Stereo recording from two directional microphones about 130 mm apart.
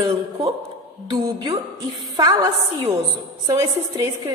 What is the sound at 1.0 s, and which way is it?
Speech, 40° right (ahead or behind).